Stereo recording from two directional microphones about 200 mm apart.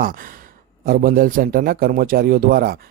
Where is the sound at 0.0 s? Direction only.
45° right (ahead or behind).